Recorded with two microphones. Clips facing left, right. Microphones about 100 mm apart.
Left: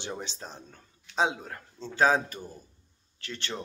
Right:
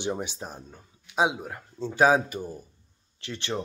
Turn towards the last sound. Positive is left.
turn(degrees=-20)  # may be behind; listen again after turning